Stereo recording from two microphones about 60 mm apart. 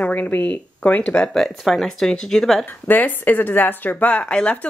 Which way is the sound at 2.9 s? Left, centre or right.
Left.